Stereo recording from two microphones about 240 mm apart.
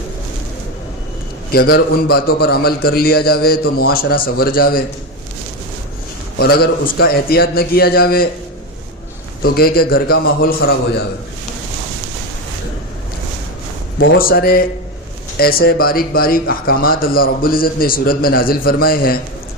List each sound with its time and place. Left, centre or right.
1.5 s speech: left
6.4 s speech: left
9.4 s speech: left
14.2 s speech: left